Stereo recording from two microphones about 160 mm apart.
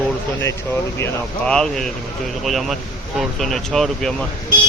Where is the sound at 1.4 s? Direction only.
5° left (ahead or behind).